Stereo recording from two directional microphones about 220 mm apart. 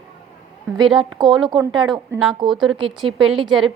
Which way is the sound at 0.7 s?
Centre (ahead or behind).